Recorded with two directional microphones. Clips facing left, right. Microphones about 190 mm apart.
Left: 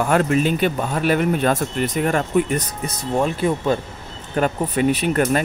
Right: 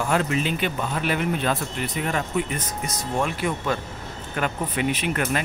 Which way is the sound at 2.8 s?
30° left (ahead or behind).